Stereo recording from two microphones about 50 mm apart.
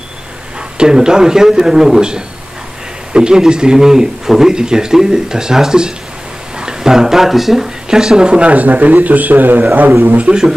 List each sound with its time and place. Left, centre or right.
0.7 s speech: centre; by 9.7 s right
10.0 s a man's voice: right